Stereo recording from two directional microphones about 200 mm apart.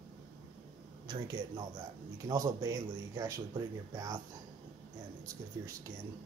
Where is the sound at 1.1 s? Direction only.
20° right (ahead or behind).